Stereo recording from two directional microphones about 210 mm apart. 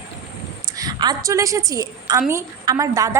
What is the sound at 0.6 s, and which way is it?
A woman's voice, 20° right (ahead or behind).